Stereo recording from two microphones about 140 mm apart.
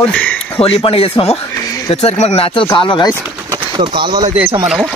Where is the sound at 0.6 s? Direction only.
45° left (ahead or behind).